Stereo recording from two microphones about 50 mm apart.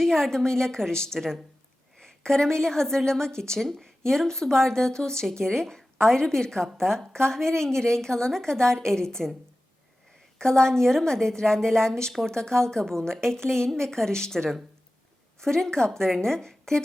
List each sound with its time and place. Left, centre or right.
0.0 s a woman's voice: centre
10.3 s speech: centre